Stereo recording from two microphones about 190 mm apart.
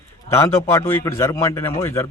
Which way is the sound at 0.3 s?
15° left (ahead or behind).